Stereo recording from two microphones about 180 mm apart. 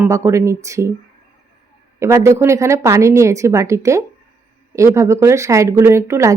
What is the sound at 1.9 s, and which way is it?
Speech, 15° right (ahead or behind).